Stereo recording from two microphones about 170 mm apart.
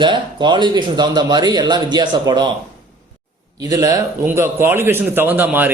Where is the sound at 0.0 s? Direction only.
25° right (ahead or behind).